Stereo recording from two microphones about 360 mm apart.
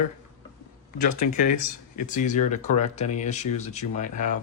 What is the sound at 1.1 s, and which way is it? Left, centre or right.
Speech, left.